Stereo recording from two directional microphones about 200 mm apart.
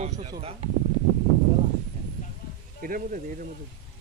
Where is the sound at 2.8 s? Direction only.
45° right (ahead or behind).